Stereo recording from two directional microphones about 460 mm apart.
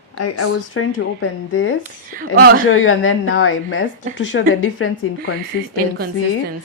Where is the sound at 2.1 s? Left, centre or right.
Centre.